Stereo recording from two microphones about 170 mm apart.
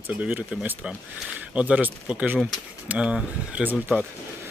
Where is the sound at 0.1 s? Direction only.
10° right (ahead or behind).